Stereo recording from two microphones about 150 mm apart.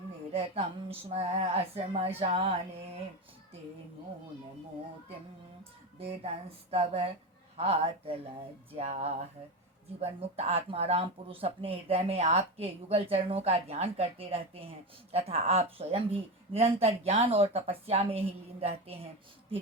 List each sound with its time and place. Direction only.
0.3 s speech: 40° right (ahead or behind)
6.0 s speech: 40° right (ahead or behind)